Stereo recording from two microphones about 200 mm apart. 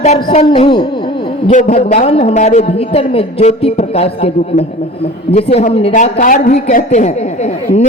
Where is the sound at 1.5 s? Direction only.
40° left (ahead or behind).